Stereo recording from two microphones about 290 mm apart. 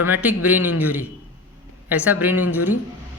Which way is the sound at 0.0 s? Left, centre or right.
Centre.